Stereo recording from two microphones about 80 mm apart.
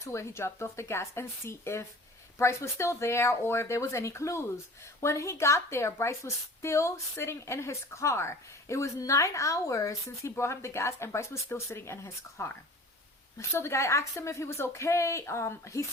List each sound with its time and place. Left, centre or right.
0.0 s speech: left